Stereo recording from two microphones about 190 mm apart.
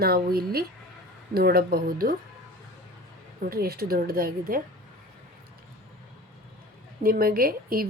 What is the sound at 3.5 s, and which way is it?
Speech, 55° right (ahead or behind).